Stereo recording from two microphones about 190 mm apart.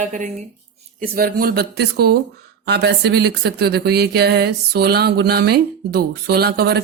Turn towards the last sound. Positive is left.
turn(degrees=-55)  # may be behind; listen again after turning